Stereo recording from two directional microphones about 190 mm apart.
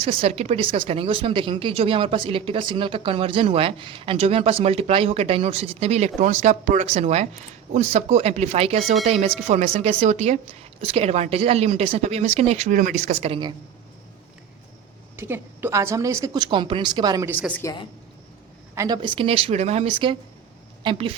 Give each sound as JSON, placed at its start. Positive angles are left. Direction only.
{"t": 0.0, "sound": "speech", "side_deg": -30}
{"t": 15.1, "sound": "a woman's voice", "side_deg": -10}
{"t": 17.5, "sound": "a woman's voice", "side_deg": 15}
{"t": 18.7, "sound": "speech", "side_deg": -20}